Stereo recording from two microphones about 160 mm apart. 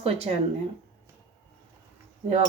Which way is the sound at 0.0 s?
40° right (ahead or behind).